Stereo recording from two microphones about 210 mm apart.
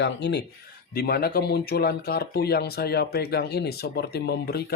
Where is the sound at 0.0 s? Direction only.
55° left (ahead or behind).